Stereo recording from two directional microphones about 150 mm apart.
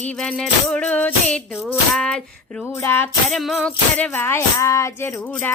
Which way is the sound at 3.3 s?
Centre (ahead or behind).